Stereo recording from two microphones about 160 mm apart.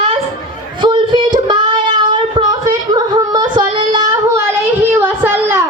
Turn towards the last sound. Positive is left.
turn(degrees=-15)  # may be behind; listen again after turning